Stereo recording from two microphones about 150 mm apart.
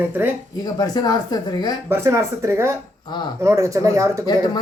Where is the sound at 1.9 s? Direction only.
15° right (ahead or behind).